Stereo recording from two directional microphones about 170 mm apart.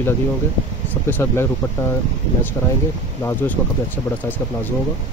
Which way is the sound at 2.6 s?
15° left (ahead or behind).